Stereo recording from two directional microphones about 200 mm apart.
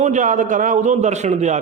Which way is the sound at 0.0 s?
40° right (ahead or behind).